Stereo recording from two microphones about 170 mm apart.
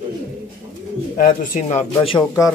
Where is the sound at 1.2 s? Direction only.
50° left (ahead or behind).